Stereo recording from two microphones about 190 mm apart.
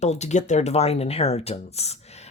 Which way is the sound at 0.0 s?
35° left (ahead or behind).